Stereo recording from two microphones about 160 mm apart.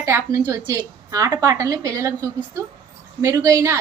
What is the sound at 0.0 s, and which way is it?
A woman's voice, 20° right (ahead or behind).